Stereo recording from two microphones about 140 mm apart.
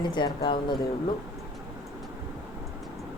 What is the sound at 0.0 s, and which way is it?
Speech, 35° left (ahead or behind).